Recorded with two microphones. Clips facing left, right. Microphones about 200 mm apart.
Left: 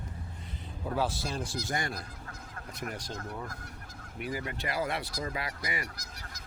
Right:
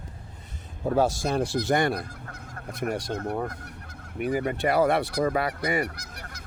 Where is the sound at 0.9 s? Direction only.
45° right (ahead or behind).